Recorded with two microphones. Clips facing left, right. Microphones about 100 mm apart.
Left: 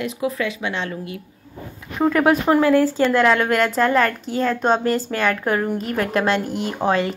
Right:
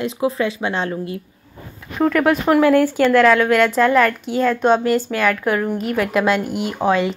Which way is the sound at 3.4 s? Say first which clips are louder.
Right 3 dB; 40° left (ahead or behind).